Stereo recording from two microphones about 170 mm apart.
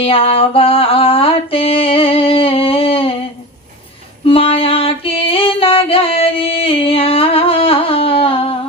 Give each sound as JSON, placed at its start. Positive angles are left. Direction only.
{"t": 0.0, "sound": "music", "side_deg": 35}
{"t": 4.3, "sound": "music", "side_deg": 35}